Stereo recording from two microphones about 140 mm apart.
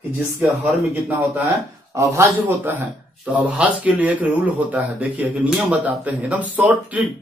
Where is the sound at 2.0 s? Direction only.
20° right (ahead or behind).